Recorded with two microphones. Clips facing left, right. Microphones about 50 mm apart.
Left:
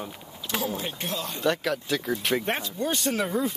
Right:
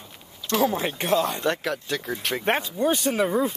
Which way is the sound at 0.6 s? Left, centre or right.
Right.